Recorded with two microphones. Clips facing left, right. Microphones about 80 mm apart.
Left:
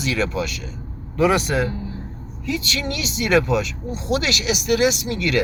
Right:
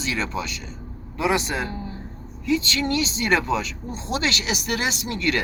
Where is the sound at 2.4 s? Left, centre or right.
Right.